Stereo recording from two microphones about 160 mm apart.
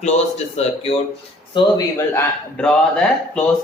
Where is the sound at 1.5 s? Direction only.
30° left (ahead or behind).